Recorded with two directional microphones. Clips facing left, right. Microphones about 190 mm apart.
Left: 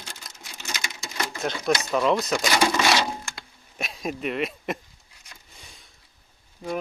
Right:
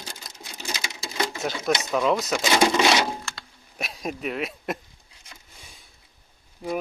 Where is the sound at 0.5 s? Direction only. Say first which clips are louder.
Right 2 dB; 35° right (ahead or behind).